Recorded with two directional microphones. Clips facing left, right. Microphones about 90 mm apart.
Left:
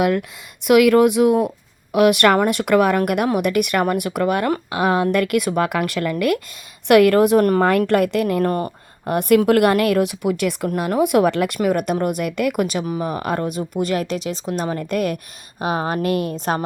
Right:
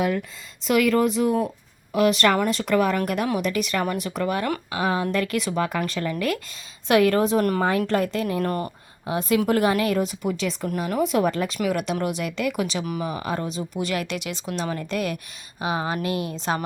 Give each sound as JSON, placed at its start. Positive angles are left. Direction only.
{"t": 0.0, "sound": "speech", "side_deg": 65}
{"t": 8.4, "sound": "speech", "side_deg": 40}
{"t": 9.0, "sound": "speech", "side_deg": 60}
{"t": 11.6, "sound": "speech", "side_deg": 45}
{"t": 12.8, "sound": "speech", "side_deg": 35}
{"t": 13.1, "sound": "speech", "side_deg": 55}